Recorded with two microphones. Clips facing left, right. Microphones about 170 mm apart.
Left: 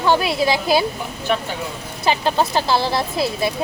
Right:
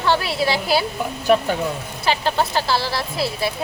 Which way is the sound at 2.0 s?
20° left (ahead or behind).